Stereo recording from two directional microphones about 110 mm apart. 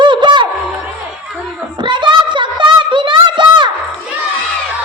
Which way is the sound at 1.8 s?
45° right (ahead or behind).